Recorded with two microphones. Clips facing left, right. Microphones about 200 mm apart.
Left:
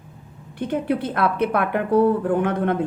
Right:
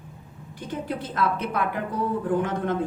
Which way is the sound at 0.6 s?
60° left (ahead or behind).